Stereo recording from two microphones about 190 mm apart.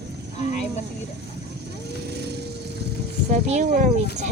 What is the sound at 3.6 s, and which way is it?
Speech, 45° right (ahead or behind).